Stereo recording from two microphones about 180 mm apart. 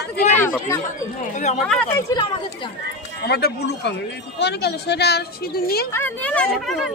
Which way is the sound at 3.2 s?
65° left (ahead or behind).